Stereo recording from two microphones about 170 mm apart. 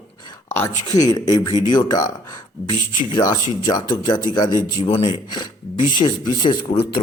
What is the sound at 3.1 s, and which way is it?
A man's voice, 20° left (ahead or behind).